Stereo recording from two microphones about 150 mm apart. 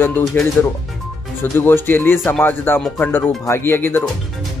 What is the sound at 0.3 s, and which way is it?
Speech, 15° left (ahead or behind).